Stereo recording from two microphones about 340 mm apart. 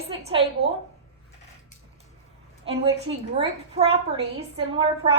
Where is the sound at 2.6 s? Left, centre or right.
Centre.